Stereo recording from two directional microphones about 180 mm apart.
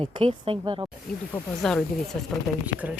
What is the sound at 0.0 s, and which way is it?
Speech, 30° right (ahead or behind).